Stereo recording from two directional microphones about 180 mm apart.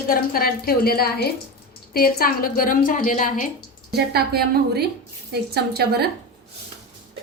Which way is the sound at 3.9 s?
60° right (ahead or behind).